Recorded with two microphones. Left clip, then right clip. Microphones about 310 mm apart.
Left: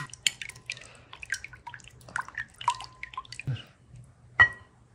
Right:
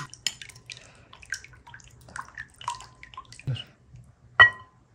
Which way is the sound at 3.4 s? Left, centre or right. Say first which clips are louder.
Left 1 dB; right.